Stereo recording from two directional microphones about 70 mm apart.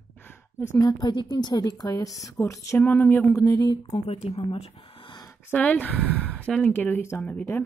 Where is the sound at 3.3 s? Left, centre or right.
Left.